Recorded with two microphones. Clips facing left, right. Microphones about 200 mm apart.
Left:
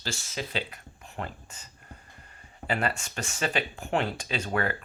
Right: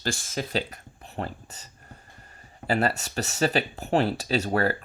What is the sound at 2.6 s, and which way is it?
Speech, 40° right (ahead or behind).